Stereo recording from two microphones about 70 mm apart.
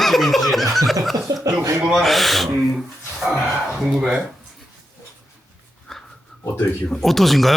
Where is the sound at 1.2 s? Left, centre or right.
Right.